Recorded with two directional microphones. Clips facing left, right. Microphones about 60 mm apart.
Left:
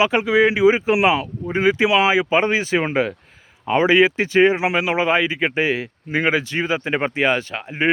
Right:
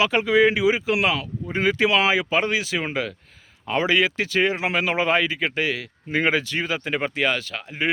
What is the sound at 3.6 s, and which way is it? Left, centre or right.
Speech, left.